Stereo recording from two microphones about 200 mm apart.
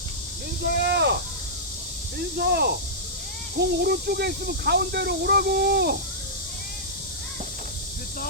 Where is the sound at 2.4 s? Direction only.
55° right (ahead or behind).